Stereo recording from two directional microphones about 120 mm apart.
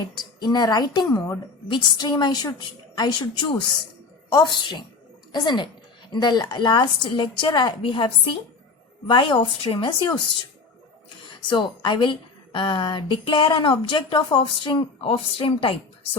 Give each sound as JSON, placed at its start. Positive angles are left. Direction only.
{"t": 0.1, "sound": "a woman's voice", "side_deg": 35}
{"t": 1.6, "sound": "a woman's voice", "side_deg": 40}
{"t": 11.2, "sound": "a woman's voice", "side_deg": 40}